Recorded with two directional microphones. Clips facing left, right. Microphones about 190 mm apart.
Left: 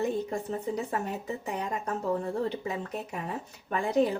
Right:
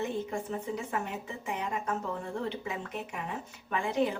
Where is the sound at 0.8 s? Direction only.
40° left (ahead or behind).